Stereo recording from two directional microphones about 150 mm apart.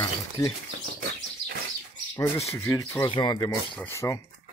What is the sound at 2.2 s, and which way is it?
Speech, 20° left (ahead or behind).